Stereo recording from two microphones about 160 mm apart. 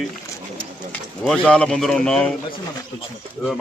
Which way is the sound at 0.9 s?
5° left (ahead or behind).